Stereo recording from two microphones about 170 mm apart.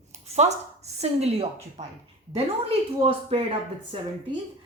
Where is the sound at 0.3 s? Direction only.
40° right (ahead or behind).